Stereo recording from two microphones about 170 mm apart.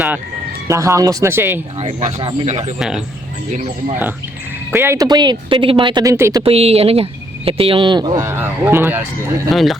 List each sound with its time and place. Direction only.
0.7 s speech: 15° right (ahead or behind)
1.8 s speech: 40° right (ahead or behind)
2.7 s speech: 5° right (ahead or behind)
4.7 s speech: 15° right (ahead or behind)
6.4 s speech: 35° right (ahead or behind); by 9.0 s 10° right (ahead or behind)
9.5 s speech: centre (ahead or behind)